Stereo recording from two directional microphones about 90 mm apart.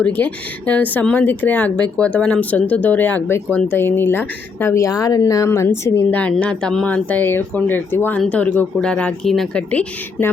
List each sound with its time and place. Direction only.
0.7 s speech: 15° left (ahead or behind)
4.8 s speech: 40° left (ahead or behind); by 6.3 s 20° left (ahead or behind)
6.3 s speech: 10° left (ahead or behind)